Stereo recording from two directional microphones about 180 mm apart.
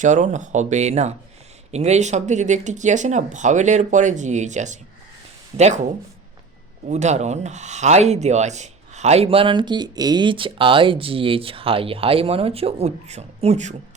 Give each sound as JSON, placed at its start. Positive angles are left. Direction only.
{"t": 0.0, "sound": "speech", "side_deg": -40}
{"t": 6.8, "sound": "speech", "side_deg": -40}